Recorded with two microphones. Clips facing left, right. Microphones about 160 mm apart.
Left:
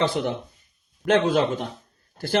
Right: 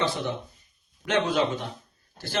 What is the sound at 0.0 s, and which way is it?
Speech, 55° left (ahead or behind).